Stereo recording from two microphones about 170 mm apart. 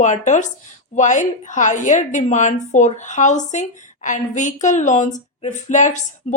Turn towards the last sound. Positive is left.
turn(degrees=45)  # may be behind; listen again after turning